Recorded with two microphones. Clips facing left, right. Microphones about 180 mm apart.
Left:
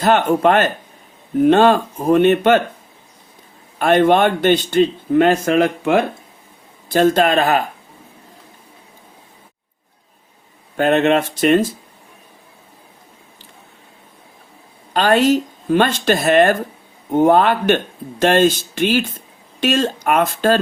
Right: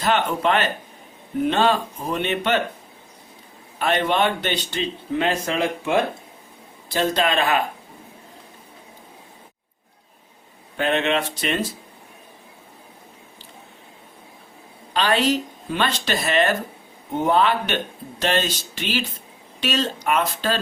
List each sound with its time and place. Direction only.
0.0 s a man's voice: 45° left (ahead or behind)
3.8 s a man's voice: 50° left (ahead or behind)
10.8 s a man's voice: 45° left (ahead or behind)
14.9 s a man's voice: 45° left (ahead or behind)